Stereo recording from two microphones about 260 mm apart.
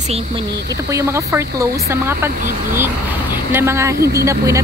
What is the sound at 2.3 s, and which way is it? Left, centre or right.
Speech, right.